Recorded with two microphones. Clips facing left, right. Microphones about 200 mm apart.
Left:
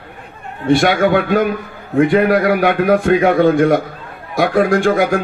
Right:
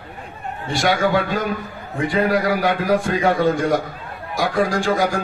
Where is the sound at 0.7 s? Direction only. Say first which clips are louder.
Left 7 dB; 60° left (ahead or behind).